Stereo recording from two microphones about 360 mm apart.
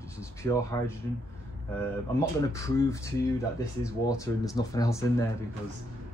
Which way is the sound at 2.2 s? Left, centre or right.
Centre.